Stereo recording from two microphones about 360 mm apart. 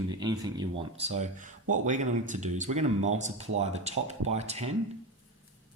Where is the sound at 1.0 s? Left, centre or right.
Centre.